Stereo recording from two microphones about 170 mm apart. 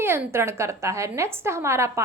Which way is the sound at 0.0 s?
15° right (ahead or behind).